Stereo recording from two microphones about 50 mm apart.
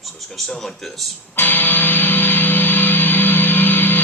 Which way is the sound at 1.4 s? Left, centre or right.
Left.